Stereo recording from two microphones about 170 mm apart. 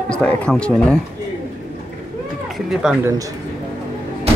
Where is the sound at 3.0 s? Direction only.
20° right (ahead or behind).